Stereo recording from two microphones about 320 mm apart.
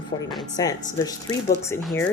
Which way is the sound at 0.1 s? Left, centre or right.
Centre.